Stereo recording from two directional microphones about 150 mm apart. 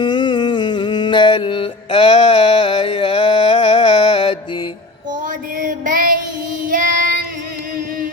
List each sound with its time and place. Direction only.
0.0 s music: 30° left (ahead or behind)
5.5 s a sound: 65° right (ahead or behind)
6.7 s child singing: 65° right (ahead or behind)